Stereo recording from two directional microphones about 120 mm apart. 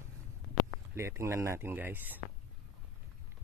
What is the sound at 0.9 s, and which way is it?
Speech, 20° right (ahead or behind).